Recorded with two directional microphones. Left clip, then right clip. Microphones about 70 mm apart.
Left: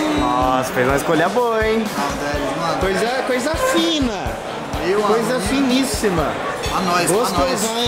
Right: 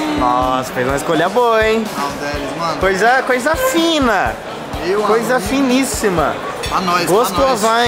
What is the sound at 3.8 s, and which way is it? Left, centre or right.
Speech, right.